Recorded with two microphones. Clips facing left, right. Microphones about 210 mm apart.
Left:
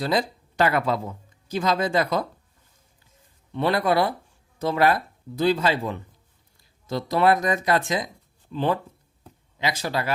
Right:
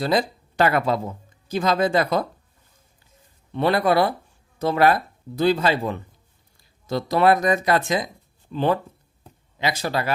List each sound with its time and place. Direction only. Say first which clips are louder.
0.0 s speech: right 2 dB; 50° right (ahead or behind)
3.6 s speech: right 2 dB; 60° right (ahead or behind)
6.8 s speech: right 2 dB; 70° right (ahead or behind); by 10.0 s 55° right (ahead or behind)